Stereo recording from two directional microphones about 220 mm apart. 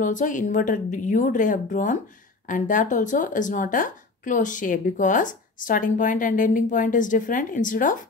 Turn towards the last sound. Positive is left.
turn(degrees=35)  # may be behind; listen again after turning